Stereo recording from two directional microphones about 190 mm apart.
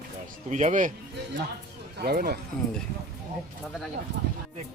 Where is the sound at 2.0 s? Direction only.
55° right (ahead or behind).